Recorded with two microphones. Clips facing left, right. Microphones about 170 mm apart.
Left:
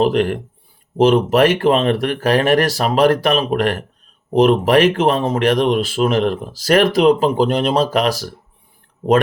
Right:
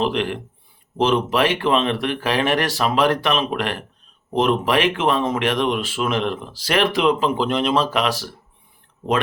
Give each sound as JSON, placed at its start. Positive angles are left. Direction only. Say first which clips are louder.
{"t": 0.0, "sound": "speech", "louder": "left 6 dB", "side_deg": 45}